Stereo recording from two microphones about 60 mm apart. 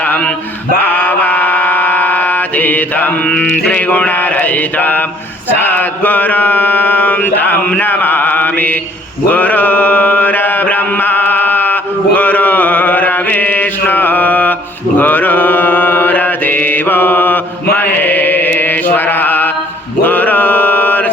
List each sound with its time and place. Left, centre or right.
0.0 s male singing: left
0.8 s mantra: left